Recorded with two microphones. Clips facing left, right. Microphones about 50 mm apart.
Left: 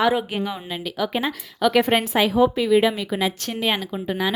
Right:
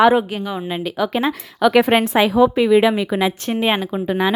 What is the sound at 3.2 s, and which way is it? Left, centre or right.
Speech, right.